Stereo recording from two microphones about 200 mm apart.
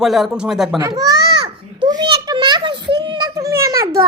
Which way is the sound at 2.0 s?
25° right (ahead or behind).